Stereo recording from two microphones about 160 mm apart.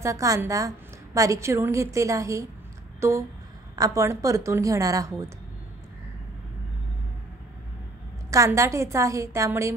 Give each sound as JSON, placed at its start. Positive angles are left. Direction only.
{"t": 0.0, "sound": "a woman's voice", "side_deg": -20}
{"t": 3.0, "sound": "a sound", "side_deg": -15}
{"t": 3.7, "sound": "a woman's voice", "side_deg": -20}
{"t": 8.3, "sound": "a woman's voice", "side_deg": -20}